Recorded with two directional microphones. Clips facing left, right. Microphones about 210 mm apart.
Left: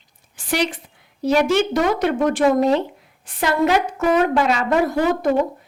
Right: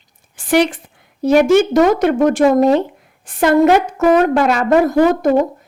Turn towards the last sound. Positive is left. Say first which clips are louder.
# right 6 dB
turn(degrees=-45)  # may be behind; listen again after turning